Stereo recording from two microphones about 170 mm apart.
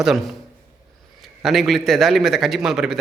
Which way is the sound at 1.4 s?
Centre (ahead or behind).